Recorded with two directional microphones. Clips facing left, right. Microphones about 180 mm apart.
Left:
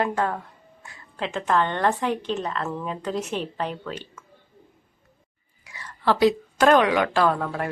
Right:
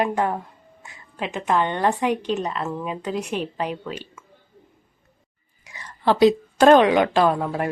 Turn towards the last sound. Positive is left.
turn(degrees=-20)  # may be behind; listen again after turning